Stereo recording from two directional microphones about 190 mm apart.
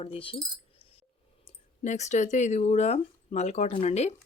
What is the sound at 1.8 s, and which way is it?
Speech, 35° left (ahead or behind).